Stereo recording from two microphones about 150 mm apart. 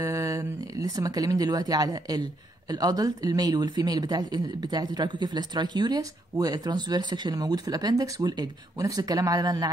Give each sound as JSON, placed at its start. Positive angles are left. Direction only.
{"t": 0.0, "sound": "speech", "side_deg": -20}